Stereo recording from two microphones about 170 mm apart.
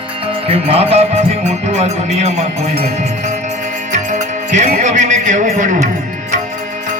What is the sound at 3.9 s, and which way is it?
Music, 45° right (ahead or behind).